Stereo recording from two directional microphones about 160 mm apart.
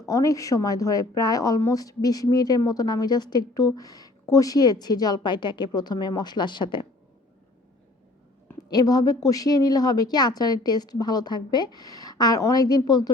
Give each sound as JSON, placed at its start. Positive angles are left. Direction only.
{"t": 0.0, "sound": "a woman's voice", "side_deg": 20}
{"t": 8.7, "sound": "a woman's voice", "side_deg": 25}